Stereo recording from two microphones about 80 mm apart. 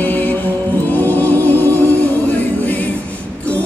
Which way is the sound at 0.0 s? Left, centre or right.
Left.